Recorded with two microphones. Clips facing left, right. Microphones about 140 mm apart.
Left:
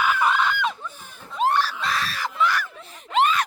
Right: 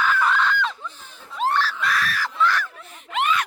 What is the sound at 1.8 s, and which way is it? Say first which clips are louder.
Screaming: right 2 dB; 25° left (ahead or behind).